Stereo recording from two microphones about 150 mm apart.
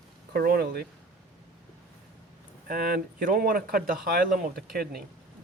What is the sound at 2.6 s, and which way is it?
Speech, 80° right.